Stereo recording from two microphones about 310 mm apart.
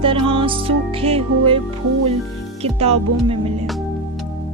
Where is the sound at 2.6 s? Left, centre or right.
Centre.